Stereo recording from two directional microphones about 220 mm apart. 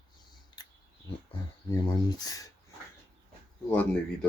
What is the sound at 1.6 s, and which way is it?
Speech, 20° left (ahead or behind).